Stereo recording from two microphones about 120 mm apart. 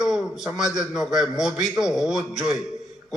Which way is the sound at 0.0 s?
5° right (ahead or behind).